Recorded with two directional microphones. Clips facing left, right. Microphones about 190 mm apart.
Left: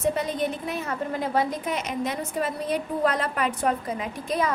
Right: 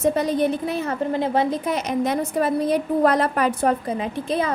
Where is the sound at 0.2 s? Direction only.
35° right (ahead or behind).